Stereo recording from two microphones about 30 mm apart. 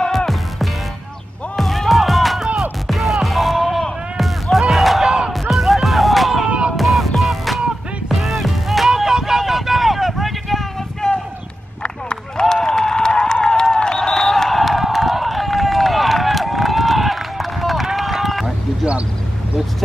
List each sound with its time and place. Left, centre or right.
1.6 s music: centre
4.6 s battle cry: centre
5.3 s music: centre
8.9 s vehicle: centre
11.0 s a sound: left
11.8 s run: left
12.7 s crowd: left; by 17.8 s centre
17.9 s run: centre